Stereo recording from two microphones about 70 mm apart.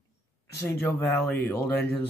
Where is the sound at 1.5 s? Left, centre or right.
Left.